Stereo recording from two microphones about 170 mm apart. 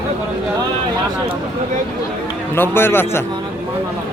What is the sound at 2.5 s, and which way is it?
Speech, 15° left (ahead or behind).